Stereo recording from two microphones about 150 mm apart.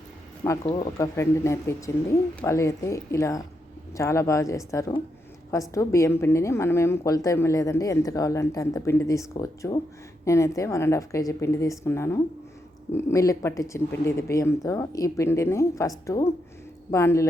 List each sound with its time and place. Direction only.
0.4 s a woman's voice: 20° left (ahead or behind)